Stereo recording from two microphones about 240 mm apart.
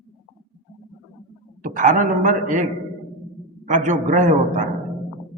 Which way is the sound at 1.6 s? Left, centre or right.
Right.